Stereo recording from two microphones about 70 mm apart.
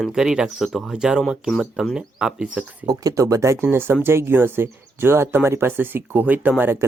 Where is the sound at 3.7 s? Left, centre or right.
Right.